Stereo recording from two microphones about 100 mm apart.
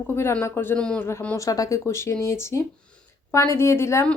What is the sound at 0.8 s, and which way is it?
Speech, 10° left (ahead or behind).